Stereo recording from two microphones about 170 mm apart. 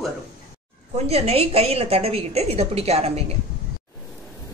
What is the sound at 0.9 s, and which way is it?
A woman's voice, 35° right (ahead or behind).